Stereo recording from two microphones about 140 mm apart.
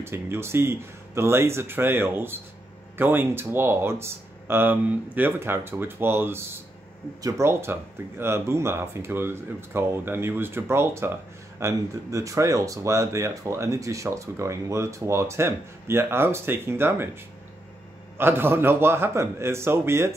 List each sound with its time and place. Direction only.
0.0 s speech: 15° right (ahead or behind)